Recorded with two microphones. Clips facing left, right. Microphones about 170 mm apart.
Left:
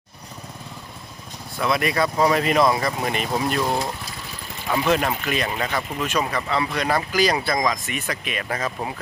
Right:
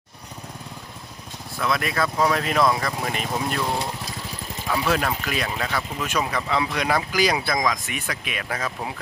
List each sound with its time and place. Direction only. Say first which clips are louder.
1.5 s speech: left 3 dB; centre (ahead or behind)
4.7 s speech: left 2 dB; centre (ahead or behind)
6.1 s speech: even; 5° right (ahead or behind)